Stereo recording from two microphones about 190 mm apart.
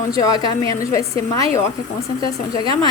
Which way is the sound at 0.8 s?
15° left (ahead or behind).